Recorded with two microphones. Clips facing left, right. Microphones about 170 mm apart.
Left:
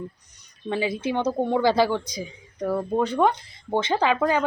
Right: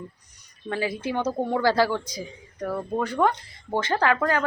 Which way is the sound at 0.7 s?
20° left (ahead or behind).